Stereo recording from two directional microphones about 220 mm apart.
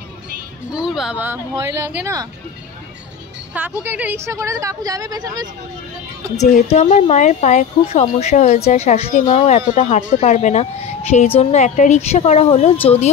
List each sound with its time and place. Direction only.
0.7 s speech: 5° right (ahead or behind)
3.8 s speech: 10° right (ahead or behind)
6.3 s speech: 30° left (ahead or behind)